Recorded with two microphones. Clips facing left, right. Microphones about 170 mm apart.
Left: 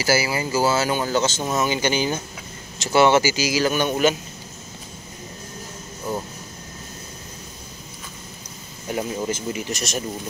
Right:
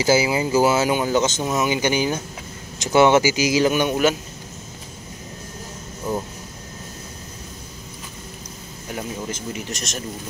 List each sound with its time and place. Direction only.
0.0 s speech: 20° right (ahead or behind)
8.9 s speech: 5° left (ahead or behind)